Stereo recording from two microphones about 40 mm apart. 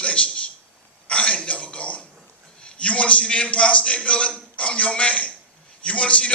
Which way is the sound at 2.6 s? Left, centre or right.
Left.